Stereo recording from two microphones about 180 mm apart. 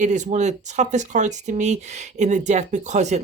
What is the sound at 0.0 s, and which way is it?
Speech, 40° right (ahead or behind).